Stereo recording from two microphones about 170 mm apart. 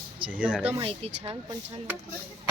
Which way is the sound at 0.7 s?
35° right (ahead or behind).